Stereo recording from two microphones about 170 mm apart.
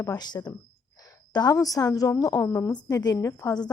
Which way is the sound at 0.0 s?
20° left (ahead or behind).